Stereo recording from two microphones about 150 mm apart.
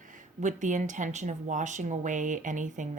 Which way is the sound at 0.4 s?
55° right (ahead or behind).